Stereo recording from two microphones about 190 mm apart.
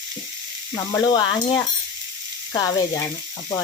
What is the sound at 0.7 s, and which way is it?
Sizzle, 20° left (ahead or behind).